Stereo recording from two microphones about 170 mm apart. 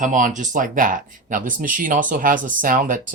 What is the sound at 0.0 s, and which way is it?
Speech, 50° right (ahead or behind).